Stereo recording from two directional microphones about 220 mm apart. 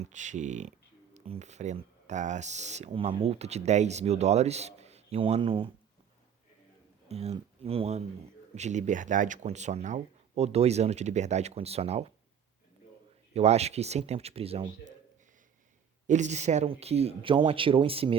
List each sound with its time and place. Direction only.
0.0 s speech: 35° right (ahead or behind)
7.1 s speech: 30° right (ahead or behind)
13.3 s speech: 30° right (ahead or behind)
16.0 s speech: 35° right (ahead or behind)